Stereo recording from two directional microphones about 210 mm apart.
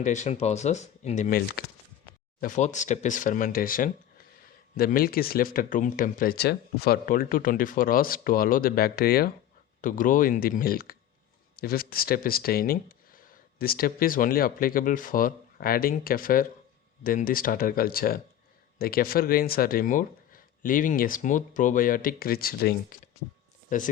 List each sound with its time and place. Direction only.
0.0 s speech: 35° left (ahead or behind)